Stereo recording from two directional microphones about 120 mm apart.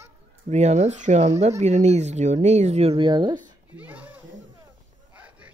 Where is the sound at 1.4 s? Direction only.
70° right (ahead or behind).